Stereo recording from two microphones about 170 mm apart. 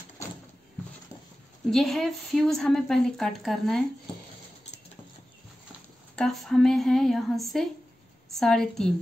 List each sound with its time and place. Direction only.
1.7 s a woman's voice: centre (ahead or behind)
6.1 s a woman's voice: centre (ahead or behind)